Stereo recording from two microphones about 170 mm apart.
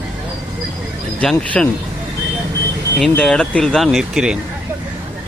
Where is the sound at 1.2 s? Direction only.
5° left (ahead or behind).